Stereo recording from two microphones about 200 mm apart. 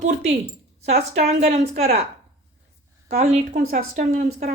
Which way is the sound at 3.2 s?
35° right (ahead or behind).